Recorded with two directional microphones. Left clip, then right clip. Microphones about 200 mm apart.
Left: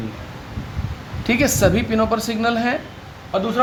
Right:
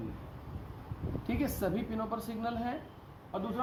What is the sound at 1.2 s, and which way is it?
A woman's voice, 50° left (ahead or behind).